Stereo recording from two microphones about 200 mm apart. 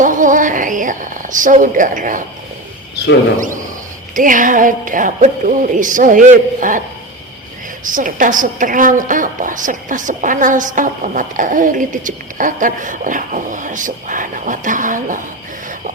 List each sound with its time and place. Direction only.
0.0 s a sound: 40° right (ahead or behind)
3.3 s a woman's voice: 40° right (ahead or behind)
7.9 s a woman's voice: 40° right (ahead or behind)